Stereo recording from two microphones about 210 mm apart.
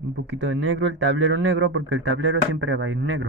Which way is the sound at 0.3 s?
60° right (ahead or behind).